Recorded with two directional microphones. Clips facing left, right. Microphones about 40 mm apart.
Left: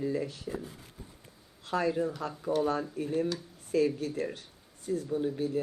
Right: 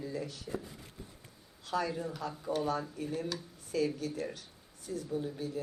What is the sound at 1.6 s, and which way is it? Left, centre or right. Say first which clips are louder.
Speech: left 5 dB; left.